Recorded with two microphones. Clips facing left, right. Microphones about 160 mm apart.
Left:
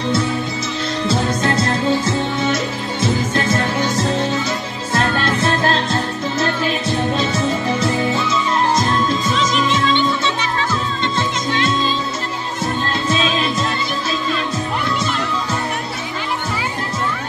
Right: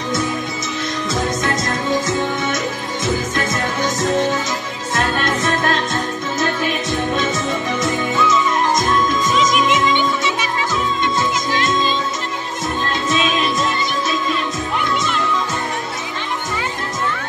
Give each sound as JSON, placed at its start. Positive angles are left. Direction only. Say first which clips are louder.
{"t": 1.0, "sound": "music", "louder": "left 3 dB", "side_deg": 30}
{"t": 6.9, "sound": "music", "louder": "left 1 dB", "side_deg": 30}
{"t": 9.5, "sound": "music", "louder": "right 1 dB", "side_deg": -10}
{"t": 13.1, "sound": "music", "louder": "even", "side_deg": 30}